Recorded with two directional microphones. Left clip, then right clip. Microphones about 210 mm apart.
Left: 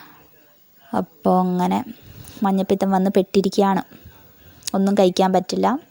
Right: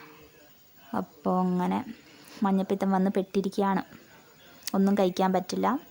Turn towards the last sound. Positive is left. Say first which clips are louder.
# left 8 dB
turn(degrees=25)  # may be behind; listen again after turning